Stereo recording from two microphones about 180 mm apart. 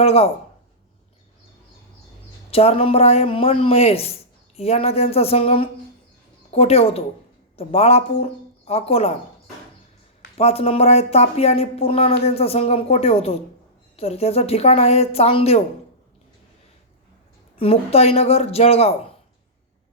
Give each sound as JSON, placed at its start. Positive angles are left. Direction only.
{"t": 0.0, "sound": "speech", "side_deg": 35}
{"t": 2.5, "sound": "speech", "side_deg": 35}
{"t": 10.3, "sound": "speech", "side_deg": 35}
{"t": 17.6, "sound": "speech", "side_deg": 35}